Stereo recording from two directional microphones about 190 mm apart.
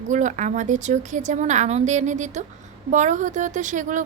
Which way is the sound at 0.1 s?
40° right (ahead or behind).